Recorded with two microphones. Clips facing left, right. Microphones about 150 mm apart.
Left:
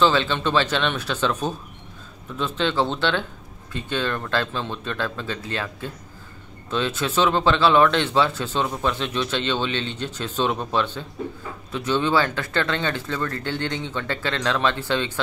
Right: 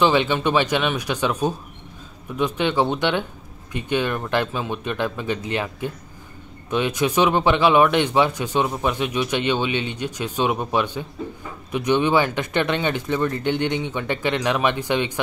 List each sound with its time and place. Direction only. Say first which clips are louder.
0.0 s speech: right 2 dB; 15° right (ahead or behind)